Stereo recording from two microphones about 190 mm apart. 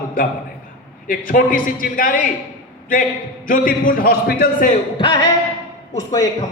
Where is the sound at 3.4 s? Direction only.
45° left (ahead or behind).